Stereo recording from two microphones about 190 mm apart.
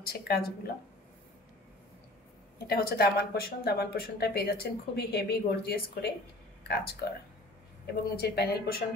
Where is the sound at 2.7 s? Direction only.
55° left (ahead or behind).